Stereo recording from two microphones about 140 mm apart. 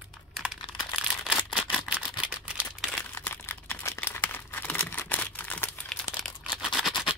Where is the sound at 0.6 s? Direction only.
35° left (ahead or behind).